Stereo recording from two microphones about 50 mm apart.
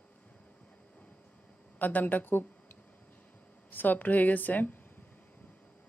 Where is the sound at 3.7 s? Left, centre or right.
Left.